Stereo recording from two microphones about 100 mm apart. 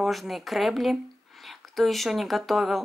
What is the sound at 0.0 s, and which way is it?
Speech, centre (ahead or behind).